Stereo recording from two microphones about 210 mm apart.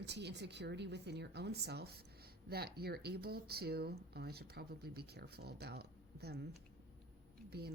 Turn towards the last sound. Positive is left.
turn(degrees=-50)  # may be behind; listen again after turning